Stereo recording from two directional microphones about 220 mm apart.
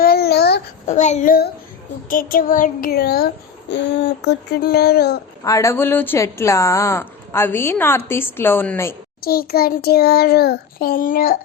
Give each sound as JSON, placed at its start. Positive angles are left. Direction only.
{"t": 0.0, "sound": "a sound", "side_deg": 45}
{"t": 0.9, "sound": "child singing", "side_deg": 30}
{"t": 5.5, "sound": "a woman's voice", "side_deg": 15}
{"t": 9.2, "sound": "child singing", "side_deg": 45}